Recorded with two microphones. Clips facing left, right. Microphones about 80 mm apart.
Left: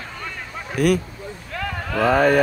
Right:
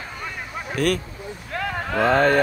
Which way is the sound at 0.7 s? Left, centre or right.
Centre.